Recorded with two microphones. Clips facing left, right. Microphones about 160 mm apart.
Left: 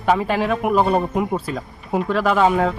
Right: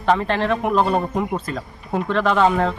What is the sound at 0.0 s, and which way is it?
Speech, 5° left (ahead or behind).